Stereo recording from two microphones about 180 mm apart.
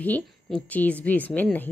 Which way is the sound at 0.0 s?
10° left (ahead or behind).